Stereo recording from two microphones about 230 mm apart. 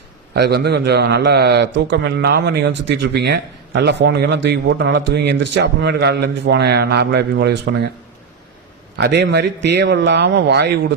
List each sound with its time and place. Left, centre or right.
0.3 s a man's voice: right
9.0 s a man's voice: right